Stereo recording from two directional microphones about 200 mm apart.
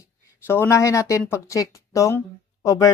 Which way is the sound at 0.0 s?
10° left (ahead or behind).